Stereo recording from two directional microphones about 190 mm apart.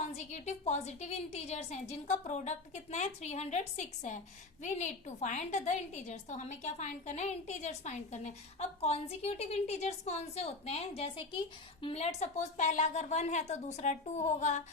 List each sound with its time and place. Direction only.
0.2 s a woman's voice: 35° left (ahead or behind)